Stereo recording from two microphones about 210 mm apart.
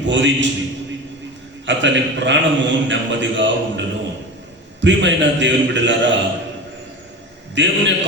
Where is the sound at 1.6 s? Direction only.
60° right (ahead or behind).